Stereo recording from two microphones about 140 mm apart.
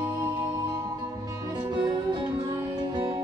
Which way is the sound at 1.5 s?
30° right (ahead or behind).